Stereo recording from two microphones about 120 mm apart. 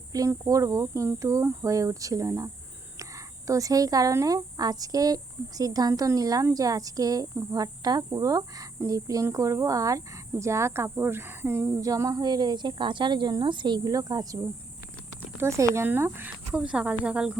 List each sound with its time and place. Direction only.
0.1 s speech: 30° right (ahead or behind)
15.4 s speech: 25° right (ahead or behind); by 17.3 s 10° right (ahead or behind)